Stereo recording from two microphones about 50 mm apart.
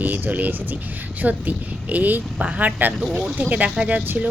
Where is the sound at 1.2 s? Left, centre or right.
Right.